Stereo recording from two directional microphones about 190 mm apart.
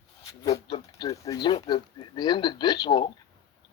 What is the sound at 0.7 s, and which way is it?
Speech, 20° left (ahead or behind).